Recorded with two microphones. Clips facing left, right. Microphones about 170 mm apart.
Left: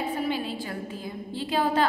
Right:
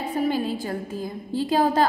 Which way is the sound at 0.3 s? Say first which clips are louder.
Right 5 dB; 45° right (ahead or behind).